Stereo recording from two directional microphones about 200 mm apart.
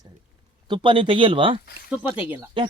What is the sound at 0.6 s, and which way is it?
Speech, 25° right (ahead or behind).